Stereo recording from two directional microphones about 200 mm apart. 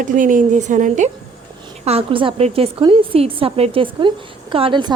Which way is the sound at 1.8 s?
30° right (ahead or behind).